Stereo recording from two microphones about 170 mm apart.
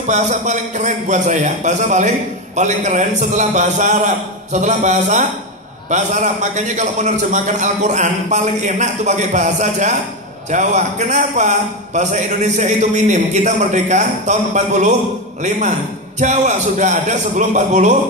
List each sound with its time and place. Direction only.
0.0 s a man's voice: 45° right (ahead or behind)
16.2 s a man's voice: 45° right (ahead or behind)